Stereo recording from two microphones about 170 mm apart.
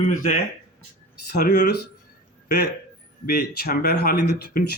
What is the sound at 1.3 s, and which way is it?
Speech, 65° left (ahead or behind).